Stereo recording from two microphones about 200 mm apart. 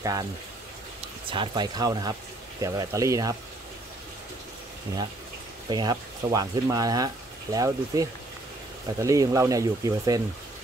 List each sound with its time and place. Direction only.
0.0 s speech: 15° right (ahead or behind)
1.3 s speech: 25° right (ahead or behind)
5.7 s speech: 20° right (ahead or behind)